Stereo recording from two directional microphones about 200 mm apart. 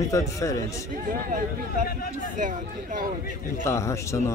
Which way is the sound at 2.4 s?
40° right (ahead or behind).